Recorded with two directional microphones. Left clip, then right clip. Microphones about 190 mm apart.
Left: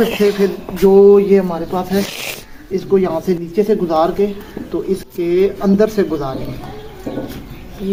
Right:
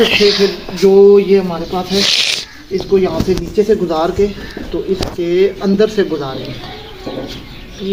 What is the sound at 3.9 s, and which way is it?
Speech, 10° left (ahead or behind).